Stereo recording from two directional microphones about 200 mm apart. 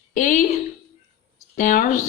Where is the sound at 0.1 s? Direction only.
40° left (ahead or behind).